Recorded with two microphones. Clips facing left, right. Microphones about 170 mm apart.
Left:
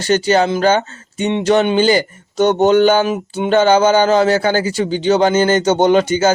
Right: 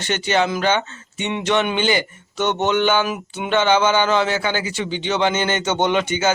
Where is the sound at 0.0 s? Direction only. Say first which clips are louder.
Left 6 dB; 40° left (ahead or behind).